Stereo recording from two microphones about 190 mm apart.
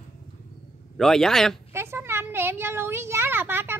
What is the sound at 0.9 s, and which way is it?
Speech, centre (ahead or behind).